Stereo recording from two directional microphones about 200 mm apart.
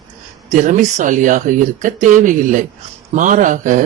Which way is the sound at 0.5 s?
35° right (ahead or behind).